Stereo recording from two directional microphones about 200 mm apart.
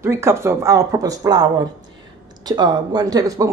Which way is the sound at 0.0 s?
15° right (ahead or behind).